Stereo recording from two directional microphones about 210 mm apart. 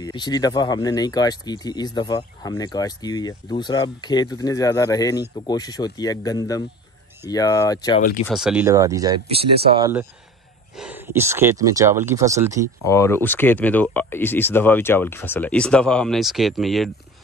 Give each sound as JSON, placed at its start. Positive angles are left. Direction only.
{"t": 0.0, "sound": "speech", "side_deg": 20}
{"t": 8.3, "sound": "speech", "side_deg": -5}
{"t": 8.6, "sound": "speech", "side_deg": -15}
{"t": 12.8, "sound": "speech", "side_deg": 15}